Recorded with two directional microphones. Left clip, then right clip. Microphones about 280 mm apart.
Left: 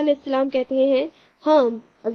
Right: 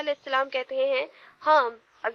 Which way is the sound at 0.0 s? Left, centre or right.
Right.